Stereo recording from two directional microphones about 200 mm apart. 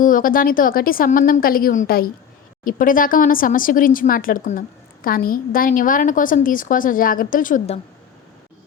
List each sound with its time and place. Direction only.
0.0 s a woman's voice: 45° left (ahead or behind)